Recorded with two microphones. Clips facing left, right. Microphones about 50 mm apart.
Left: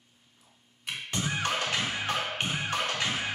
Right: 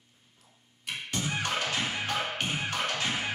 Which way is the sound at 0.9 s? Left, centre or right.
Left.